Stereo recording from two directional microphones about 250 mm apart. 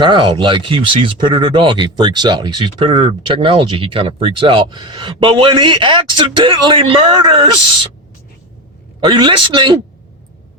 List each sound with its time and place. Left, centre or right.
0.0 s speech: centre
9.0 s speech: centre